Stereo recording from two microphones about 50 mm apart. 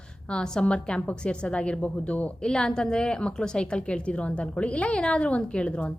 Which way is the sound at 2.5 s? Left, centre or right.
Centre.